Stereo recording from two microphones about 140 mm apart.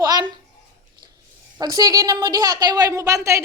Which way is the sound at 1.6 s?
25° right (ahead or behind).